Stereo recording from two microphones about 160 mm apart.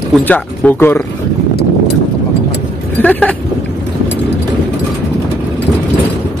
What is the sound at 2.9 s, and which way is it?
Speech, 10° left (ahead or behind).